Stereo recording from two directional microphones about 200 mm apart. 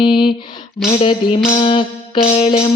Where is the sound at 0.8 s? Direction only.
30° left (ahead or behind).